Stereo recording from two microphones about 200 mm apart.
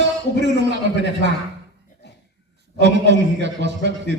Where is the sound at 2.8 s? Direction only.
60° right (ahead or behind).